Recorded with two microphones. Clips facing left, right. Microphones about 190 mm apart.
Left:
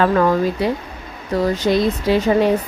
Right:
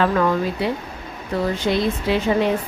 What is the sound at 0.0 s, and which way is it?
Speech, 40° left (ahead or behind).